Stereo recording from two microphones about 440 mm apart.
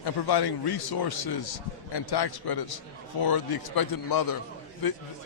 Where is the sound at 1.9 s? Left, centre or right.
Left.